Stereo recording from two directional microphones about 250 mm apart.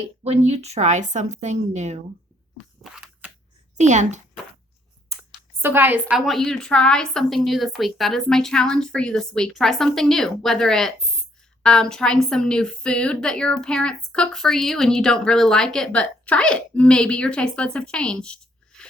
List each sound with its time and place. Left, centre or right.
0.3 s a woman's voice: right
2.6 s a sound: centre
3.8 s a woman's voice: right
5.6 s a woman's voice: centre